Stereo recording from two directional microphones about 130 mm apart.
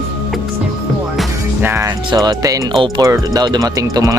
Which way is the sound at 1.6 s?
15° right (ahead or behind).